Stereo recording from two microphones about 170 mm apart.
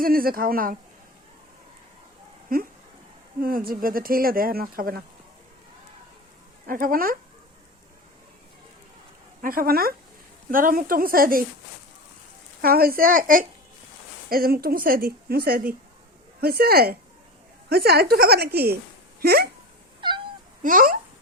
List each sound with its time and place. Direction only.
0.0 s speech: 60° right (ahead or behind)
2.5 s speech: 55° right (ahead or behind)
6.7 s speech: 55° right (ahead or behind)
9.4 s speech: 55° right (ahead or behind)
12.6 s speech: 60° right (ahead or behind)
20.0 s cat: 30° right (ahead or behind)
20.6 s a child's voice: 55° right (ahead or behind)